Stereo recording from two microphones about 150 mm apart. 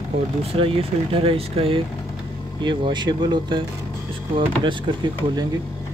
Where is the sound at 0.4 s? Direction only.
40° right (ahead or behind).